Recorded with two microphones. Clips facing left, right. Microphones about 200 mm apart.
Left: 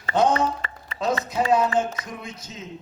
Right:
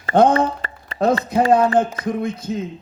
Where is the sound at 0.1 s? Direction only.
55° right (ahead or behind).